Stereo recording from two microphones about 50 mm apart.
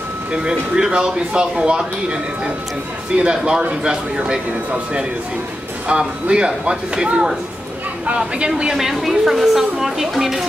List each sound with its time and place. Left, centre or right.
0.3 s speech: centre
5.9 s speech: right
8.5 s a woman's voice: centre